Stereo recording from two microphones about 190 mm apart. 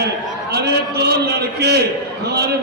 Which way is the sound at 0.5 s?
60° right (ahead or behind).